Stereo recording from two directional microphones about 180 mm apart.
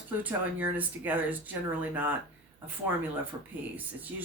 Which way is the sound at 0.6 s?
10° right (ahead or behind).